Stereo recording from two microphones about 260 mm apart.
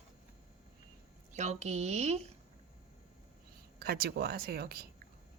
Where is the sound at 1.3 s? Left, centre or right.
Right.